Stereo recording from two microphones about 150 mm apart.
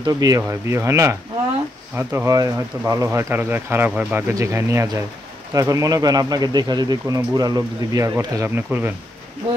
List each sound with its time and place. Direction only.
0.0 s speech: 25° right (ahead or behind)